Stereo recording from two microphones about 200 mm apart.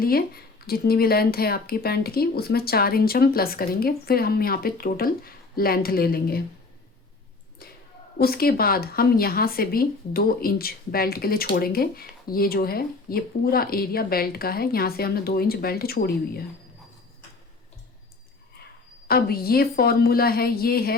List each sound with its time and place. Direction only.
0.0 s speech: 50° left (ahead or behind)
7.6 s a sound: 50° left (ahead or behind)
8.2 s speech: 50° left (ahead or behind)
19.0 s speech: 50° left (ahead or behind)